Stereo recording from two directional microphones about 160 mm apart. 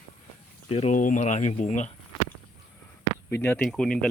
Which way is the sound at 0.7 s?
45° left (ahead or behind).